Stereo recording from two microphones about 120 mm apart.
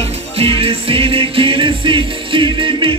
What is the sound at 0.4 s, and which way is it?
Music, 50° right (ahead or behind).